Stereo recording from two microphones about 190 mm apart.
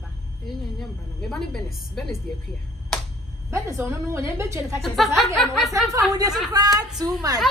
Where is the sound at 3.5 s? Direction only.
15° right (ahead or behind).